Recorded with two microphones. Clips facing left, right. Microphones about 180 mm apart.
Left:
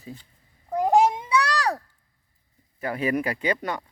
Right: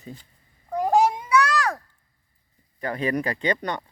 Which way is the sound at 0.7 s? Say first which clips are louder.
Left 1 dB; 20° left (ahead or behind).